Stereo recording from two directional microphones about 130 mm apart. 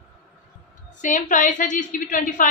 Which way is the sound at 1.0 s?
80° left.